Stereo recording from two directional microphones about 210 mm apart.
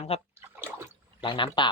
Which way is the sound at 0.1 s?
30° left (ahead or behind).